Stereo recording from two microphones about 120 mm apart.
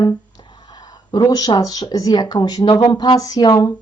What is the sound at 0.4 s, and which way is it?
A woman's voice, 35° left (ahead or behind).